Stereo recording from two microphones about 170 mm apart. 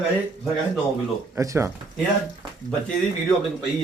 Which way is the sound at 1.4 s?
15° right (ahead or behind).